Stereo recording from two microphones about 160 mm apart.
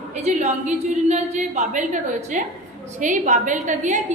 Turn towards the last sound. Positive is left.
turn(degrees=-50)  # may be behind; listen again after turning